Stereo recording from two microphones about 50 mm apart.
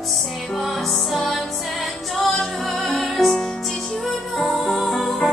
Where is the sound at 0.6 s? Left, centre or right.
Centre.